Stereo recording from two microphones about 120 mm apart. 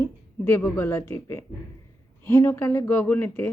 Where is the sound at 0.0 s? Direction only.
15° left (ahead or behind).